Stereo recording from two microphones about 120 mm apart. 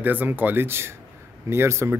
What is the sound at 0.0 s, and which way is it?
Speech, 15° right (ahead or behind).